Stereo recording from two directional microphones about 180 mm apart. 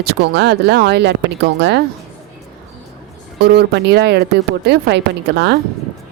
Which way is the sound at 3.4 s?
65° right (ahead or behind).